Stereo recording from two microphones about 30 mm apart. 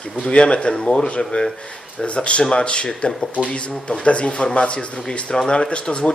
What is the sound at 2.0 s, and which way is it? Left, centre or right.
Speech, left.